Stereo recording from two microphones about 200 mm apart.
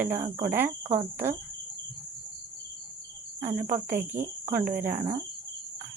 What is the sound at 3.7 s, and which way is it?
Speech, 10° right (ahead or behind).